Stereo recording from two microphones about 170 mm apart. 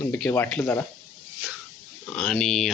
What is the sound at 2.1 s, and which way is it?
Speech, 5° left (ahead or behind).